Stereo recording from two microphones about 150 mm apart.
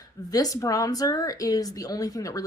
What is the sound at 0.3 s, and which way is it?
Speech, 25° left (ahead or behind).